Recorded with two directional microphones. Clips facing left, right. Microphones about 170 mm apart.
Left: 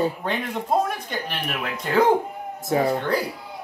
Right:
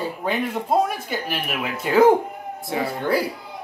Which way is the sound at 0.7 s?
5° right (ahead or behind).